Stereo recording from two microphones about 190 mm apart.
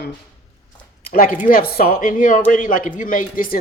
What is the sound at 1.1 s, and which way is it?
Speech, 45° left (ahead or behind).